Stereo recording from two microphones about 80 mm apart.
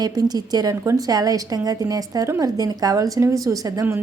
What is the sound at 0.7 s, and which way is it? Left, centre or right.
A woman's voice, right.